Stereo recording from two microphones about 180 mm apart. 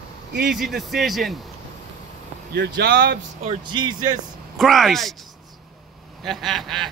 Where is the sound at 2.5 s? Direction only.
70° right (ahead or behind).